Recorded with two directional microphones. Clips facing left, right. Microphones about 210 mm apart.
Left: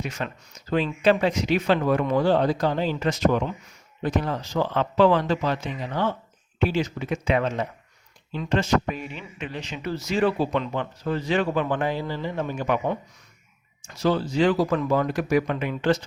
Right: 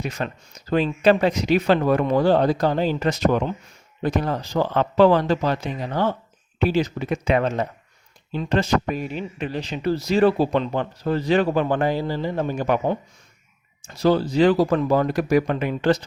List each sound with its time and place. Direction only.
0.0 s speech: 35° right (ahead or behind)